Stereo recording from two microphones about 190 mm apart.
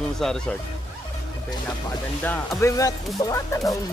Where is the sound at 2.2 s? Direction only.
10° left (ahead or behind).